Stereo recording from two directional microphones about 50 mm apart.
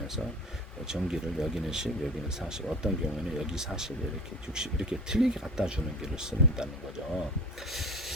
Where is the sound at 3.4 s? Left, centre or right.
Centre.